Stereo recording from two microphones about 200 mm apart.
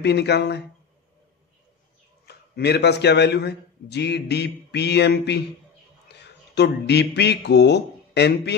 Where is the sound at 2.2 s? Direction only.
55° left (ahead or behind).